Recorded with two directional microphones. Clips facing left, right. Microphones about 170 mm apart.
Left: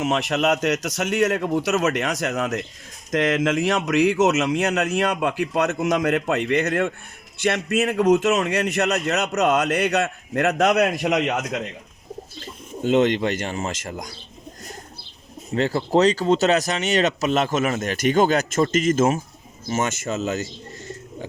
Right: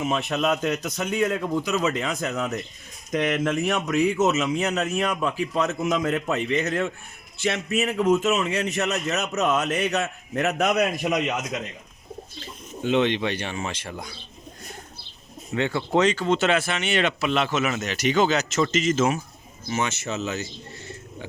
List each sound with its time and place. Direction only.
0.0 s a man's voice: 90° left
12.9 s speech: 45° left (ahead or behind)
15.5 s speech: 35° left (ahead or behind)